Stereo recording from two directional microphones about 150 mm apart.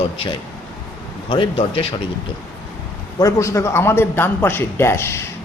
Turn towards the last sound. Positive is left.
turn(degrees=15)  # may be behind; listen again after turning